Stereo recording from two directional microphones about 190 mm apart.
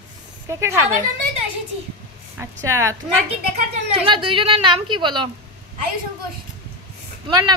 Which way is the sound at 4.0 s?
25° right (ahead or behind).